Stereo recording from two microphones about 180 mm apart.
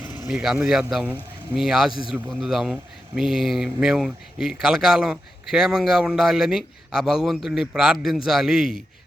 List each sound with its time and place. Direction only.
0.3 s speech: 5° right (ahead or behind)